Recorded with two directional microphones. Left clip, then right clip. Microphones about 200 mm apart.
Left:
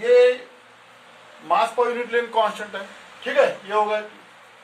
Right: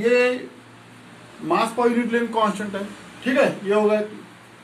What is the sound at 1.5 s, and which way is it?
Speech, 25° left (ahead or behind).